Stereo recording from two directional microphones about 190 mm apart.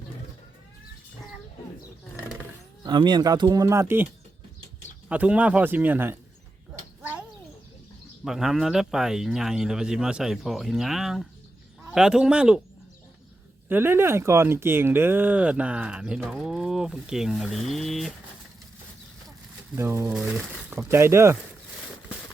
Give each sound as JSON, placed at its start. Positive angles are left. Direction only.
{"t": 2.8, "sound": "speech", "side_deg": -25}
{"t": 7.0, "sound": "bird", "side_deg": -10}
{"t": 8.2, "sound": "speech", "side_deg": 0}
{"t": 13.7, "sound": "speech", "side_deg": -10}
{"t": 19.7, "sound": "speech", "side_deg": -15}
{"t": 20.1, "sound": "speech", "side_deg": 0}